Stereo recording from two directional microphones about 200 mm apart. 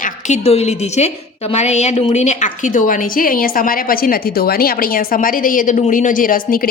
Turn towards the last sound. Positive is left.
turn(degrees=45)  # may be behind; listen again after turning